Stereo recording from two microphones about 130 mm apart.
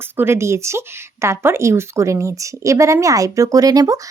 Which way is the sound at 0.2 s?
20° right (ahead or behind).